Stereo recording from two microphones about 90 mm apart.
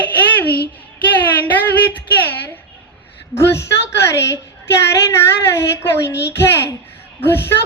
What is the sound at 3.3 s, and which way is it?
A woman's voice, 30° left (ahead or behind).